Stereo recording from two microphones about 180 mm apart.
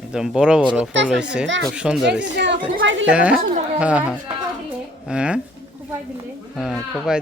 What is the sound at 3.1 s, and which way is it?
Speech, 5° right (ahead or behind).